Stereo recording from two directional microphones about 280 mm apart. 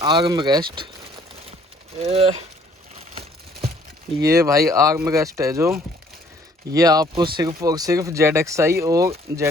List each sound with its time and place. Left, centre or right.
0.0 s speech: centre
2.0 s speech: right
4.2 s speech: centre